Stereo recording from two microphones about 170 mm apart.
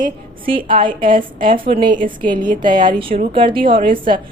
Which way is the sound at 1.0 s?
55° right (ahead or behind).